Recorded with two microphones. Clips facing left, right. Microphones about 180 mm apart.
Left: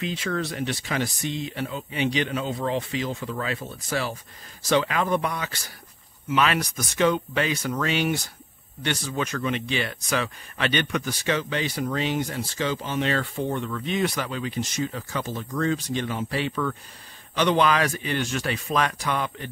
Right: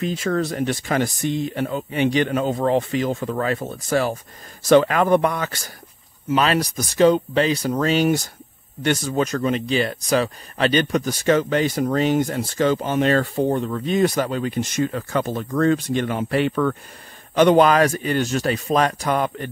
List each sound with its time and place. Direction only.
0.0 s speech: 45° right (ahead or behind)
6.3 s speech: 35° right (ahead or behind)